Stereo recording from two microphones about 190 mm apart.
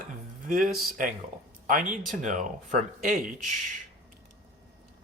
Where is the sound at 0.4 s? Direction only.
50° right (ahead or behind).